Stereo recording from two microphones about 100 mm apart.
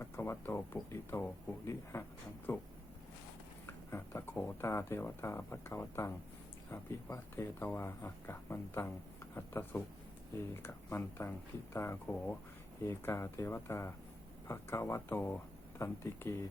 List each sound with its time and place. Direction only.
0.0 s speech: 25° left (ahead or behind)
3.7 s speech: 25° left (ahead or behind)